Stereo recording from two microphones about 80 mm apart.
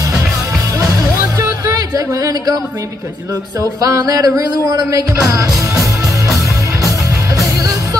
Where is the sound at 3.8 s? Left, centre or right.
Right.